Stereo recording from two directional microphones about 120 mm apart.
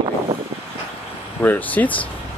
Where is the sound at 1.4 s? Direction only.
15° left (ahead or behind).